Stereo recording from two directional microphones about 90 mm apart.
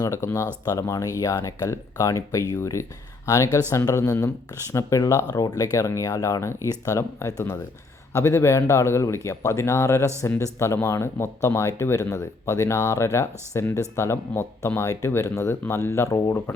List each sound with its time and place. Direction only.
0.0 s speech: 35° left (ahead or behind)